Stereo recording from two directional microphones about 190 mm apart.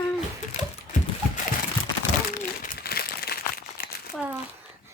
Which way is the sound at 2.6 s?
50° left (ahead or behind).